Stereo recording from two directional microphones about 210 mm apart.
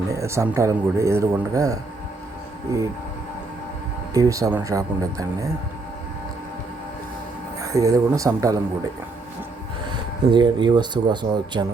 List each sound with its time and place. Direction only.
0.1 s a man's voice: 15° right (ahead or behind)
4.1 s a man's voice: 15° right (ahead or behind)
7.6 s a man's voice: 15° right (ahead or behind)
9.9 s speech: 20° right (ahead or behind)